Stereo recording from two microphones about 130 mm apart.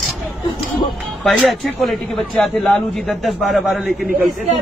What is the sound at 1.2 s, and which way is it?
A man's voice, centre (ahead or behind).